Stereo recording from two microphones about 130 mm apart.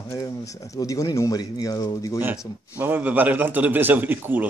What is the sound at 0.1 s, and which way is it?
Speech, 25° left (ahead or behind).